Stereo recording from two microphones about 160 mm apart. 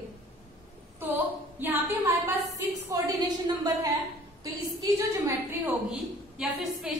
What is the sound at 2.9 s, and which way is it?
A woman's voice, 25° right (ahead or behind).